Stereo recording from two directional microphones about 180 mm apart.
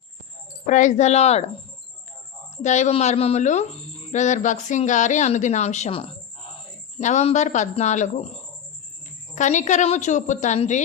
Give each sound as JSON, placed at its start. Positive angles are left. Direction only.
{"t": 0.7, "sound": "speech", "side_deg": 45}
{"t": 2.6, "sound": "speech", "side_deg": 40}
{"t": 9.3, "sound": "speech", "side_deg": 45}